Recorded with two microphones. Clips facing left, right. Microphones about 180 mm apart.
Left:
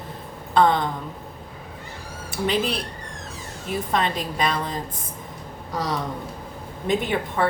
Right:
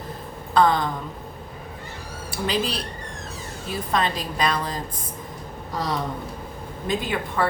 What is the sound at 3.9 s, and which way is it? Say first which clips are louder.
Speech: right 1 dB; 25° left (ahead or behind).